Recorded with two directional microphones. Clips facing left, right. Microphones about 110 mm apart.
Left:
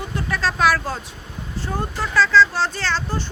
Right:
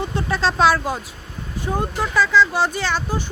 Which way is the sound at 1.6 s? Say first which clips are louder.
Right 3 dB; 15° right (ahead or behind).